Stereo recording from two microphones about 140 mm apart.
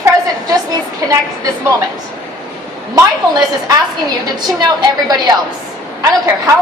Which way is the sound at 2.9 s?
25° right (ahead or behind).